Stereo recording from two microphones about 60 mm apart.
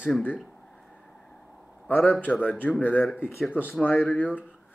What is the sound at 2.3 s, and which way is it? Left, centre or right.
Speech, centre.